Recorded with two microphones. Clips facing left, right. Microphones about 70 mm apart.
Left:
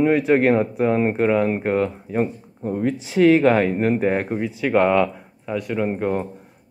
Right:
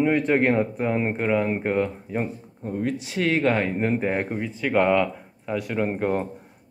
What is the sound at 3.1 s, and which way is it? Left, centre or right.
Speech, left.